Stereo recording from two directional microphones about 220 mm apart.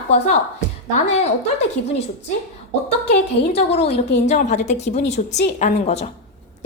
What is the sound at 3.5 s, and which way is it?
A woman's voice, 30° left (ahead or behind).